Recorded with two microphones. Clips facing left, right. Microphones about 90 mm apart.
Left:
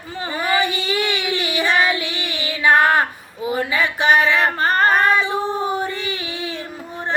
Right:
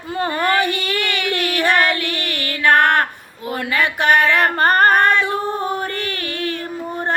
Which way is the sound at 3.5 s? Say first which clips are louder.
Right 2 dB; 60° right (ahead or behind).